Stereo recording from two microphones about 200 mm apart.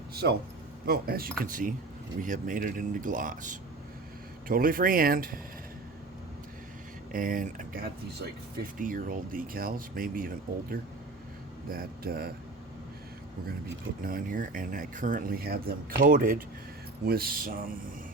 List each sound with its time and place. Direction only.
0.1 s a man's voice: 50° right (ahead or behind)
7.1 s speech: 40° right (ahead or behind)
14.0 s speech: 45° right (ahead or behind)